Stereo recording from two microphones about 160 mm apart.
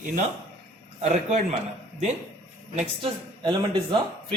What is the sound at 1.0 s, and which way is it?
Speech, 45° right (ahead or behind).